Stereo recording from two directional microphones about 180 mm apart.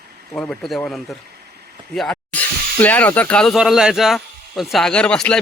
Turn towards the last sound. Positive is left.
turn(degrees=5)  # may be behind; listen again after turning